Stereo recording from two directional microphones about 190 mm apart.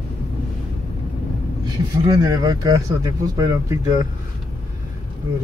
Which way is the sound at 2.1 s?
20° right (ahead or behind).